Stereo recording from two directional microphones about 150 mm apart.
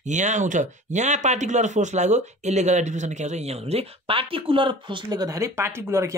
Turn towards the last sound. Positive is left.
turn(degrees=-15)  # may be behind; listen again after turning